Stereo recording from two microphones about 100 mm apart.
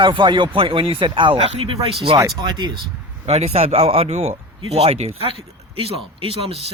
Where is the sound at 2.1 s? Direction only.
45° right (ahead or behind).